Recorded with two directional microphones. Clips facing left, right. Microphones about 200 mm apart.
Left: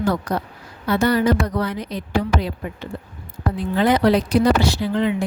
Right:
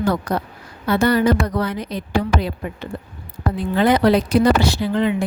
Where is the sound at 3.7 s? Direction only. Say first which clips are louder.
Right 1 dB; 60° right (ahead or behind).